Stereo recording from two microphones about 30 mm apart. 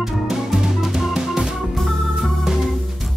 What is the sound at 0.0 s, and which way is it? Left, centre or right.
Music, centre.